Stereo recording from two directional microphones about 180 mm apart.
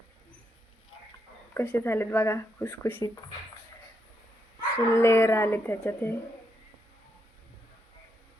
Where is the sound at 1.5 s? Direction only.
15° left (ahead or behind).